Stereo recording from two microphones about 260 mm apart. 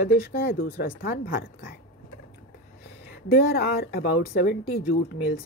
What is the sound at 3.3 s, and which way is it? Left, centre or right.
Speech, left.